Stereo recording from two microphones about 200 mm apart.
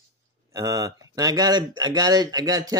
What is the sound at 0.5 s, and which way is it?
Speech, 15° right (ahead or behind).